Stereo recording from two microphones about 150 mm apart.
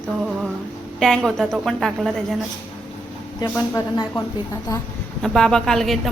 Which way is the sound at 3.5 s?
20° left (ahead or behind).